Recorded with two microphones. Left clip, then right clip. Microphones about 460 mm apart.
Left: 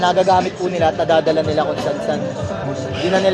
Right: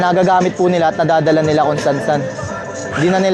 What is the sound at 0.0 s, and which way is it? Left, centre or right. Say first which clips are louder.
Speech: right 2 dB; right.